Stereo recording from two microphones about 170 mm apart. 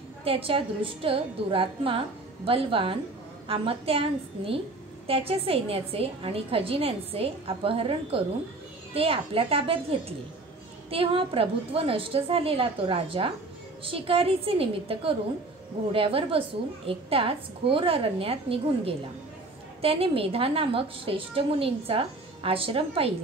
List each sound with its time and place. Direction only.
0.2 s a woman's voice: 35° right (ahead or behind)